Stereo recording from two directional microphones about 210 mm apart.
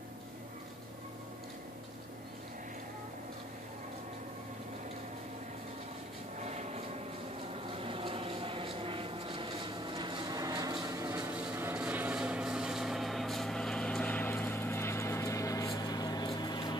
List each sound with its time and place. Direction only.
6.4 s vehicle: 30° right (ahead or behind); by 16.7 s 20° left (ahead or behind)